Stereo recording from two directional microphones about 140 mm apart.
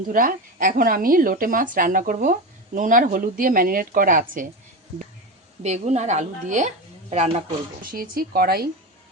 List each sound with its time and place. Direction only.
0.1 s speech: 80° right
5.6 s a woman's voice: 55° right (ahead or behind)
7.8 s speech: 85° right